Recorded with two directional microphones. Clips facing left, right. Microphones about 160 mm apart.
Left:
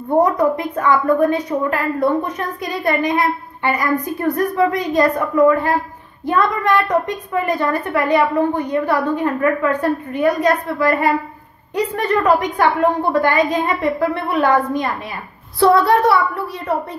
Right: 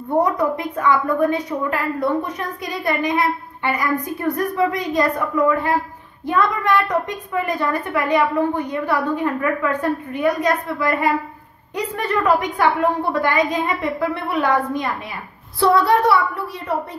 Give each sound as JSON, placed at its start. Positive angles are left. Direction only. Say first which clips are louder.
{"t": 0.6, "sound": "a woman's voice", "louder": "left 2 dB", "side_deg": 40}
{"t": 2.9, "sound": "a woman's voice", "louder": "left 2 dB", "side_deg": 30}
{"t": 15.6, "sound": "speech", "louder": "left 3 dB", "side_deg": 50}